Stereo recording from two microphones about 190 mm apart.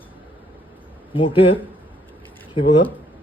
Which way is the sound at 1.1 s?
25° left (ahead or behind).